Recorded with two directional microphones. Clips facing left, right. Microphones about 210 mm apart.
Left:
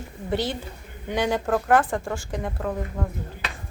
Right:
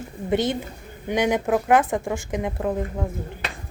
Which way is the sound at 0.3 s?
20° right (ahead or behind).